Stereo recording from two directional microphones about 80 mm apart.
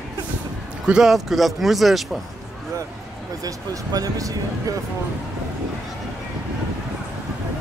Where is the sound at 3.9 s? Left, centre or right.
Right.